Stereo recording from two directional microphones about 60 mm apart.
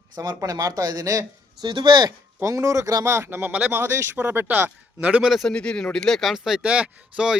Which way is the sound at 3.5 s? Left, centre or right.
Centre.